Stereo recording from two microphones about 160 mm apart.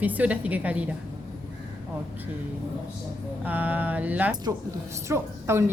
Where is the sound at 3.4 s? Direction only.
10° right (ahead or behind).